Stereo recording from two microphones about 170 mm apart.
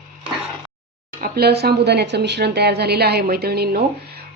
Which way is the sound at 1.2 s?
70° right (ahead or behind).